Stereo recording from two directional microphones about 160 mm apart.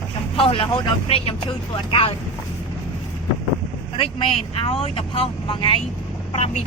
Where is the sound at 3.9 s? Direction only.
35° left (ahead or behind).